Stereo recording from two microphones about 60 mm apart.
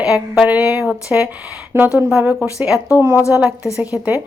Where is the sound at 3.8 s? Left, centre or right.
Right.